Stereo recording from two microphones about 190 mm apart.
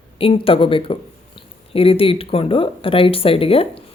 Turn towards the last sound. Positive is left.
turn(degrees=30)  # may be behind; listen again after turning